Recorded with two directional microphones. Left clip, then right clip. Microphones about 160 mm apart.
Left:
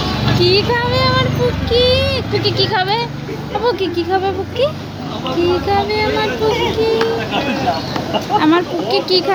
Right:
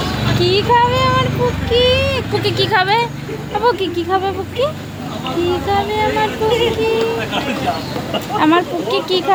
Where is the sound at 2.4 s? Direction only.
65° right (ahead or behind).